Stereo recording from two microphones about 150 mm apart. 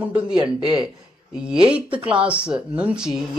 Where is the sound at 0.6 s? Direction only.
5° right (ahead or behind).